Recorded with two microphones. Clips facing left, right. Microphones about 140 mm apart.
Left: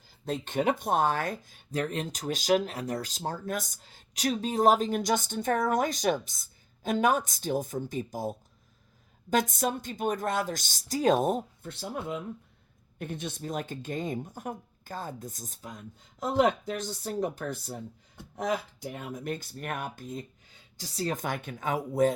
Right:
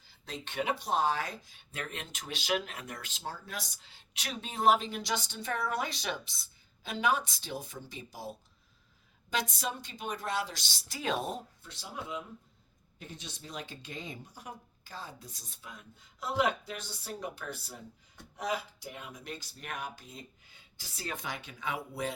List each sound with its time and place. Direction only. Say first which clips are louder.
0.3 s speech: left 7 dB; 45° left (ahead or behind)
20.7 s speech: left 9 dB; 40° left (ahead or behind)